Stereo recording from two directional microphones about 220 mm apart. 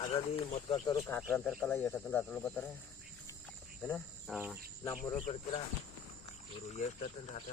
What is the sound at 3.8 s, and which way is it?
Cricket, 5° left (ahead or behind).